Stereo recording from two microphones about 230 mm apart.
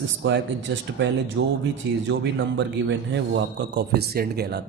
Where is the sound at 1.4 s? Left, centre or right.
Right.